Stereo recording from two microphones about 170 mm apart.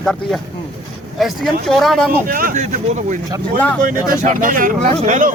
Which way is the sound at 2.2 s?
55° right (ahead or behind).